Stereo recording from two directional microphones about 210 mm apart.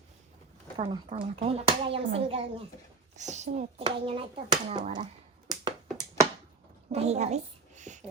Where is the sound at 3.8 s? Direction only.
25° right (ahead or behind).